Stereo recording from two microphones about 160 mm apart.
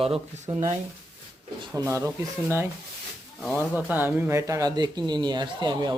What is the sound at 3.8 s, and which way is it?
Speech, 10° right (ahead or behind).